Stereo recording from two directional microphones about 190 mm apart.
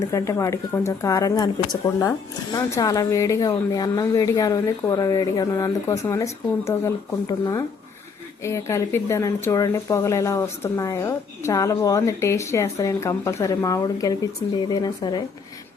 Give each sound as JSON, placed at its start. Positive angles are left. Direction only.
{"t": 0.1, "sound": "speech", "side_deg": 15}